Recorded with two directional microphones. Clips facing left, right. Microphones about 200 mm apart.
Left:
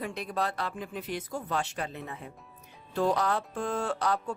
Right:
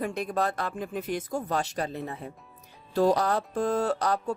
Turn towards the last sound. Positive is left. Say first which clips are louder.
# right 3 dB
turn(degrees=-40)  # may be behind; listen again after turning